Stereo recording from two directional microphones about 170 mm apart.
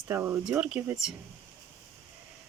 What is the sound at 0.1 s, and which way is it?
Speech, 15° right (ahead or behind).